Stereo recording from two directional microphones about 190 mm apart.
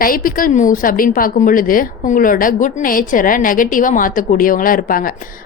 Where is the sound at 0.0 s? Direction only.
50° left (ahead or behind).